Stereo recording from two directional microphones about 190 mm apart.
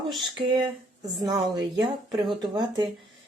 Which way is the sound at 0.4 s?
25° right (ahead or behind).